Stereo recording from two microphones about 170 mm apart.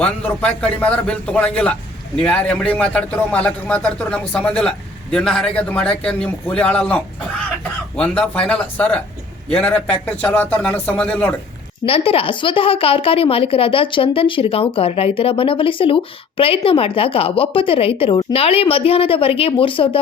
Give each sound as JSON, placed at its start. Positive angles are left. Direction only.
{"t": 0.0, "sound": "a man's voice", "side_deg": 5}
{"t": 11.9, "sound": "speech", "side_deg": 35}